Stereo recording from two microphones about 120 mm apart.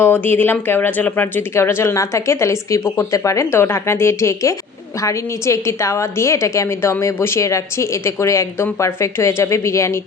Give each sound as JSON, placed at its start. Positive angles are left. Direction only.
{"t": 0.0, "sound": "a woman's voice", "side_deg": 15}